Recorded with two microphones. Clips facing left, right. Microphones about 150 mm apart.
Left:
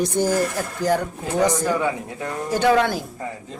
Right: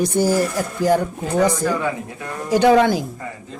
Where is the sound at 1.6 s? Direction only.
15° left (ahead or behind).